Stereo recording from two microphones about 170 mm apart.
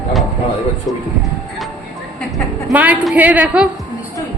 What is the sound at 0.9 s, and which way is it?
Speech, 20° left (ahead or behind).